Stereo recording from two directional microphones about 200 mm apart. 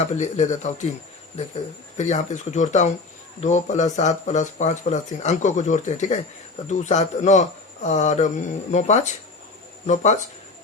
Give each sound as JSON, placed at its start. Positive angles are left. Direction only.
{"t": 0.0, "sound": "speech", "side_deg": 35}
{"t": 2.0, "sound": "speech", "side_deg": 35}